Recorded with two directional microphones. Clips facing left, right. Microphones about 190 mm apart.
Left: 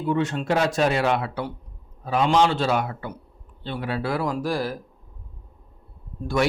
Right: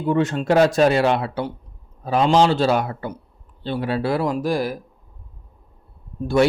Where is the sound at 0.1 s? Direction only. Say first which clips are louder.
Right 5 dB; 45° right (ahead or behind); by 4.8 s 15° right (ahead or behind).